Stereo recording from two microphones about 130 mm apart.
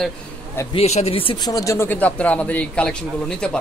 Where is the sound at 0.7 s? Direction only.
55° left (ahead or behind); by 1.9 s 25° left (ahead or behind).